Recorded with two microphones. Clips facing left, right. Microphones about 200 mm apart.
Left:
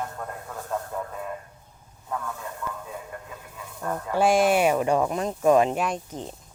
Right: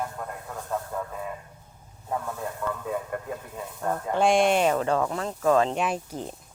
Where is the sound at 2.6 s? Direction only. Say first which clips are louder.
Right 5 dB; 50° right (ahead or behind).